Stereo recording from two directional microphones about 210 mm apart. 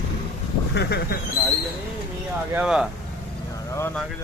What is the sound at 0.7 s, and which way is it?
Speech, 50° left (ahead or behind).